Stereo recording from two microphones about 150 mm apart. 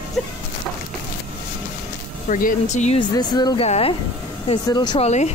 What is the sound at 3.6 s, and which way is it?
Speech, 40° left (ahead or behind).